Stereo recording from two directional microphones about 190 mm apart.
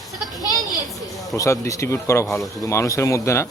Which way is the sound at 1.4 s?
15° left (ahead or behind).